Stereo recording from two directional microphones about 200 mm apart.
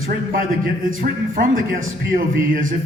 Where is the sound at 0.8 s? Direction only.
45° right (ahead or behind).